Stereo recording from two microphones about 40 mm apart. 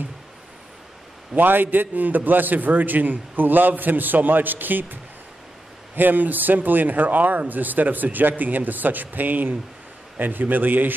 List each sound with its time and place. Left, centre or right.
1.3 s a man's voice: right
5.9 s a man's voice: right